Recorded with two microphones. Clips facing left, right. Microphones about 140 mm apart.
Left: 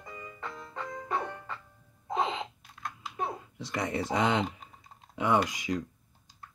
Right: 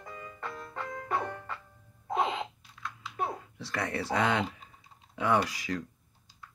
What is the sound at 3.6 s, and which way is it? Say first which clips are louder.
Speech: left 2 dB; 20° left (ahead or behind).